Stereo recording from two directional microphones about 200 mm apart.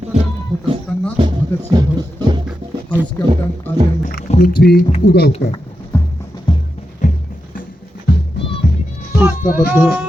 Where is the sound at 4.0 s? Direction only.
45° left (ahead or behind).